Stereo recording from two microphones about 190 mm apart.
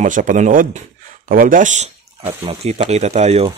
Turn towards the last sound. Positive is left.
turn(degrees=-35)  # may be behind; listen again after turning